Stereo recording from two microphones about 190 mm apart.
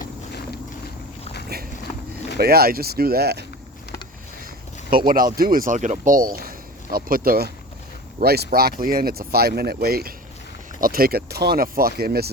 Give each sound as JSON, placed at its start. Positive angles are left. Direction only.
{"t": 2.4, "sound": "speech", "side_deg": -55}
{"t": 4.9, "sound": "speech", "side_deg": -50}